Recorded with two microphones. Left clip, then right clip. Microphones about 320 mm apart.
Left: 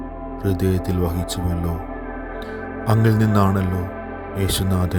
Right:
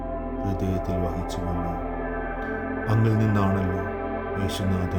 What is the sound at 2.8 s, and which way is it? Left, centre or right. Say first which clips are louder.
Speech: left 7 dB; centre.